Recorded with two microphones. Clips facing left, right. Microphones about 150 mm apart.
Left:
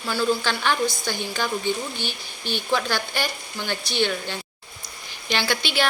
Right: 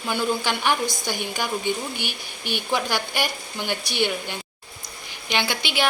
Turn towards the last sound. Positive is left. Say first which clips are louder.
# left 1 dB
turn(degrees=-15)  # may be behind; listen again after turning